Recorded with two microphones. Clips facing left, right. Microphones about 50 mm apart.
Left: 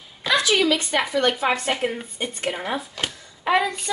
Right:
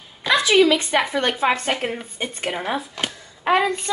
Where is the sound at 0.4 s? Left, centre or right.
Centre.